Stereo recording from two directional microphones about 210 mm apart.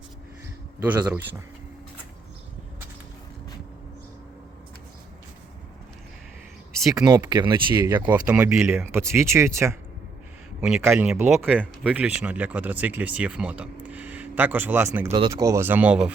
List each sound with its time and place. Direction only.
0.8 s speech: 5° right (ahead or behind)
6.9 s speech: 15° right (ahead or behind)
7.9 s speech: 10° right (ahead or behind)
10.6 s speech: centre (ahead or behind)
15.0 s speech: 25° right (ahead or behind)
15.3 s speech: 15° right (ahead or behind)